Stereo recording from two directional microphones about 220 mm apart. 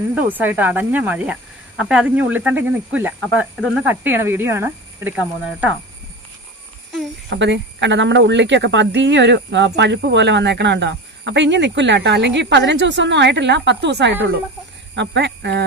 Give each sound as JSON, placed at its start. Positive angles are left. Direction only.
{"t": 0.1, "sound": "speech", "side_deg": -10}
{"t": 7.3, "sound": "a woman's voice", "side_deg": -55}